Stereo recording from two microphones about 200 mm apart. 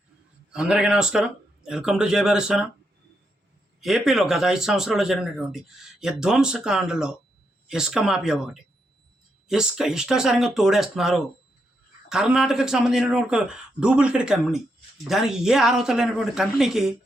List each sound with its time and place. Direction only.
0.5 s speech: 5° right (ahead or behind)
3.8 s speech: centre (ahead or behind)